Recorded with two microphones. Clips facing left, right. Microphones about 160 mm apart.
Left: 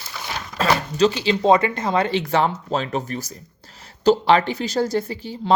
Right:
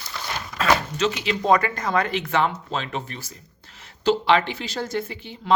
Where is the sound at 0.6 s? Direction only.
35° left (ahead or behind).